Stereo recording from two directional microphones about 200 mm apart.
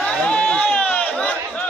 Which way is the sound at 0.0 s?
5° left (ahead or behind).